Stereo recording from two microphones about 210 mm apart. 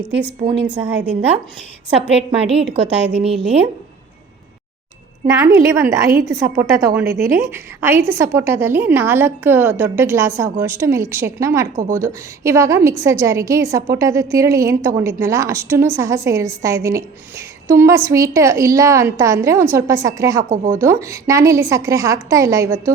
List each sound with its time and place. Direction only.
0.7 s a woman's voice: 5° right (ahead or behind)
2.0 s a woman's voice: 30° right (ahead or behind)
5.2 s a woman's voice: 15° right (ahead or behind)